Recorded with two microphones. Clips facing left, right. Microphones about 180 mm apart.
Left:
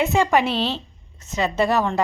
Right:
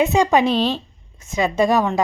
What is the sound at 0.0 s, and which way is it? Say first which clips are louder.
Speech: right 3 dB; 15° right (ahead or behind).